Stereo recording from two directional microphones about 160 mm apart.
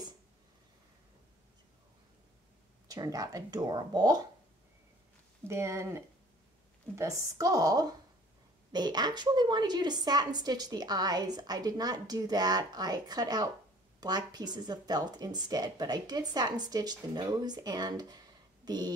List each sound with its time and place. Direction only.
2.9 s a woman's voice: 20° right (ahead or behind)
5.5 s a woman's voice: 15° right (ahead or behind)